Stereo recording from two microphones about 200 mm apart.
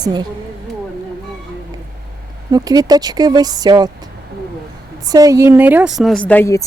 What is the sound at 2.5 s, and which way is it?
Speech, 20° right (ahead or behind).